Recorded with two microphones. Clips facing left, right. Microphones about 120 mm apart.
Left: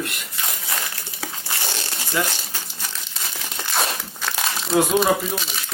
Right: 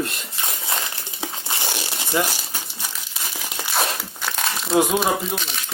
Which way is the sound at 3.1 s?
5° right (ahead or behind).